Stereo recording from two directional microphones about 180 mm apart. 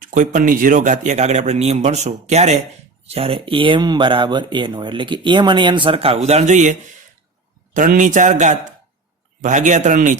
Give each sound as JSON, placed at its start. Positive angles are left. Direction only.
{"t": 0.0, "sound": "a man's voice", "side_deg": -45}